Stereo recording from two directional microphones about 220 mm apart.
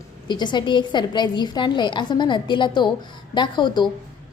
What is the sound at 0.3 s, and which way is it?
A woman's voice, 20° left (ahead or behind).